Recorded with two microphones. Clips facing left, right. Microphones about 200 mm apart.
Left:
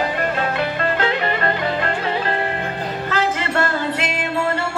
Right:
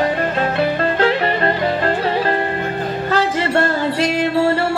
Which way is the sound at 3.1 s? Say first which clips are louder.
Right 4 dB; 35° right (ahead or behind).